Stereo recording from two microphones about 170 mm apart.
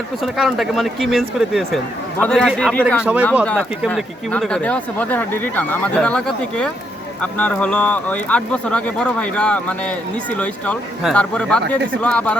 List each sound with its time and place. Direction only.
0.2 s speech: centre (ahead or behind)
3.0 s speech: 10° right (ahead or behind)
3.4 s speech: 5° left (ahead or behind)